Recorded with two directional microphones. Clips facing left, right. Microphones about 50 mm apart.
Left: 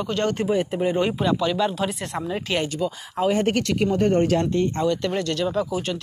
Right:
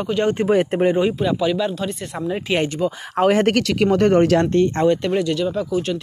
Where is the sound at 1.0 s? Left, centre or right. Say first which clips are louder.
Right 3 dB; centre.